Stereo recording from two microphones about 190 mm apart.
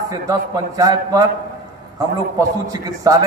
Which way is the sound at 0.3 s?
20° right (ahead or behind).